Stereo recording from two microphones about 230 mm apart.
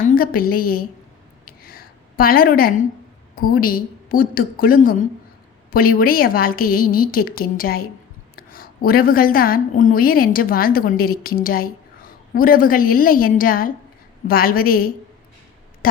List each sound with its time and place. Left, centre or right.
0.0 s a woman's voice: left
1.5 s a sound: left
3.6 s a woman's voice: left